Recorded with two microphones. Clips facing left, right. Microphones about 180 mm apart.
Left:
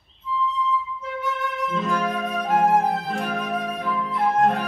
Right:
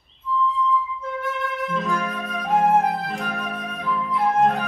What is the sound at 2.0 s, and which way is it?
Flute, 5° left (ahead or behind).